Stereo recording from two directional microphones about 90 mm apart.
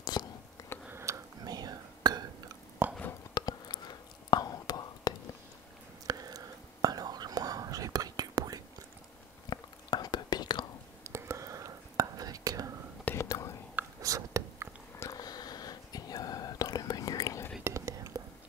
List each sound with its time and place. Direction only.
0.0 s a sound: 50° left (ahead or behind)
0.8 s whispering: 30° right (ahead or behind)
1.4 s whispering: 50° right (ahead or behind)
2.8 s chewing: 25° right (ahead or behind)
3.3 s whispering: 50° left (ahead or behind)
6.0 s whispering: 45° right (ahead or behind)
9.5 s whispering: 50° left (ahead or behind)
11.1 s whispering: 30° right (ahead or behind)
13.1 s whispering: 35° left (ahead or behind)
14.0 s a sound: 35° right (ahead or behind)
15.0 s whispering: 40° left (ahead or behind)
17.6 s whispering: 35° right (ahead or behind)